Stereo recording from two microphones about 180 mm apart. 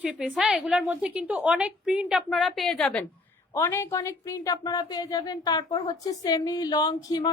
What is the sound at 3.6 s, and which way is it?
A woman's voice, 15° left (ahead or behind).